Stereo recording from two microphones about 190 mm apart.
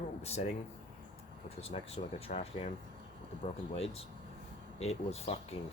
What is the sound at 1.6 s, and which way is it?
Speech, 35° left (ahead or behind).